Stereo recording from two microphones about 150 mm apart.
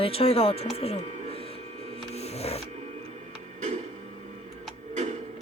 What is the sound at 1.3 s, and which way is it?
Printer, 40° left (ahead or behind).